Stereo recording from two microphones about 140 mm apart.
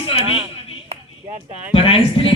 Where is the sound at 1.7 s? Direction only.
40° left (ahead or behind).